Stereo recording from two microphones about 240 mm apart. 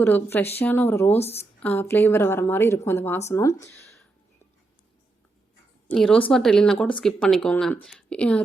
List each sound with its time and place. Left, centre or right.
0.0 s a woman's voice: centre
5.9 s speech: centre